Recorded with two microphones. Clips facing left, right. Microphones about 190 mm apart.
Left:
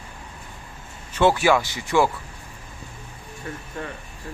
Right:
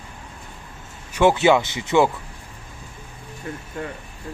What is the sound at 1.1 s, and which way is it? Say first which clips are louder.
Speech: right 2 dB; 20° right (ahead or behind).